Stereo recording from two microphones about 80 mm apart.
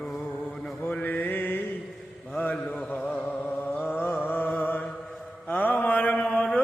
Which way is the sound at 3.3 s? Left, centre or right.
Left.